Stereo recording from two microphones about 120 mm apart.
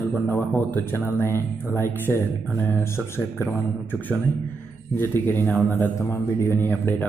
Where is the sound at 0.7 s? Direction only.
15° left (ahead or behind).